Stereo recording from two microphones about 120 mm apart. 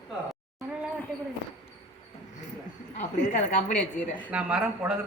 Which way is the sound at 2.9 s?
90° left.